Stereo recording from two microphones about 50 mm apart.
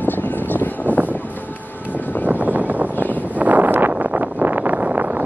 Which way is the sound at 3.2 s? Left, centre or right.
Right.